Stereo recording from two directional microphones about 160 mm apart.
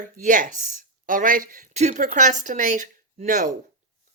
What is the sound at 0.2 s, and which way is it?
Speech, 55° right (ahead or behind).